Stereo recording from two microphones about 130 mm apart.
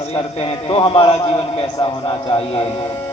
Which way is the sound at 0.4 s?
35° left (ahead or behind).